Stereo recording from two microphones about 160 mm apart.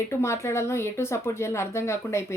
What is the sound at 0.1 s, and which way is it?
Speech, 15° left (ahead or behind).